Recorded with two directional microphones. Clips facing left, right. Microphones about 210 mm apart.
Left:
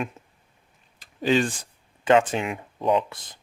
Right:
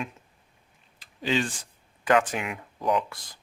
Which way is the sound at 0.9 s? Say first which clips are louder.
Left 5 dB; 45° left (ahead or behind).